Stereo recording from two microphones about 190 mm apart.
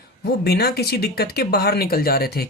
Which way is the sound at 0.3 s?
55° left (ahead or behind).